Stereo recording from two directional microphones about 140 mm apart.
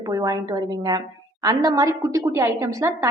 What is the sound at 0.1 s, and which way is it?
A woman's voice, 25° right (ahead or behind).